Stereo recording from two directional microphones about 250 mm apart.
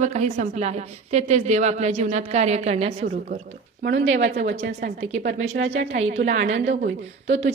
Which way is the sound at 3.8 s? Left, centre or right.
Right.